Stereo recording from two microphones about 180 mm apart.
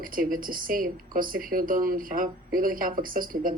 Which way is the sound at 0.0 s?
50° right (ahead or behind).